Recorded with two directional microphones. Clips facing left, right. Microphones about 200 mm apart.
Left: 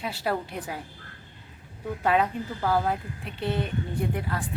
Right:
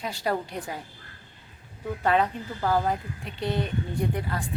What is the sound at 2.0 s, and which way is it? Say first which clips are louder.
Speech: even; 5° left (ahead or behind).